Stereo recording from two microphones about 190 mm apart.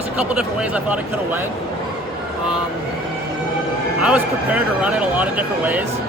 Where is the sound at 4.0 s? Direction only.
5° right (ahead or behind).